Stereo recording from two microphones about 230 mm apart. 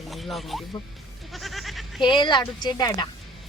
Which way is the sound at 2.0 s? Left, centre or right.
Centre.